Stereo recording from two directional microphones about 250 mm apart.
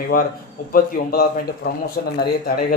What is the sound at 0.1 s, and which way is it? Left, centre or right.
Speech, left.